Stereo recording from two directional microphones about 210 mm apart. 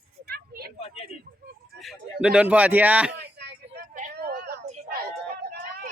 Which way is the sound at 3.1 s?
55° right (ahead or behind).